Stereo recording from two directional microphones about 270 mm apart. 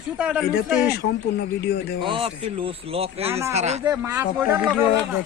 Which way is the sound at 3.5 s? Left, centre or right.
Right.